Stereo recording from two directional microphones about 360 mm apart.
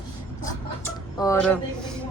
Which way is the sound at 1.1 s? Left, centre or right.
Centre.